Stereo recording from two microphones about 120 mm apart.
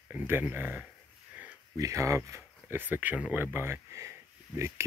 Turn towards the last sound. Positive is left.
turn(degrees=-25)  # may be behind; listen again after turning